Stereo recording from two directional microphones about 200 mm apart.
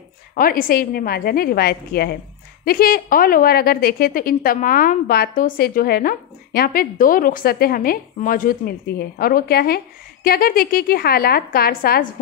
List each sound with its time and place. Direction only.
0.3 s a woman's voice: 45° left (ahead or behind)